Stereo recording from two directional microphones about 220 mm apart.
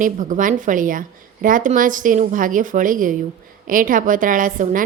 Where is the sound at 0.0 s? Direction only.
35° right (ahead or behind).